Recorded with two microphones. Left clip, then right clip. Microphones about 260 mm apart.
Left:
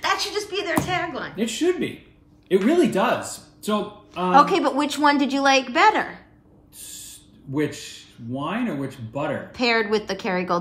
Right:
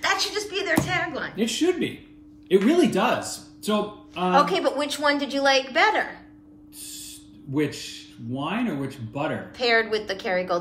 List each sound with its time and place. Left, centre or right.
0.0 s a sound: centre
2.4 s speech: centre
3.6 s a sound: centre
4.4 s a woman's voice: left
8.3 s speech: centre
9.5 s a woman's voice: left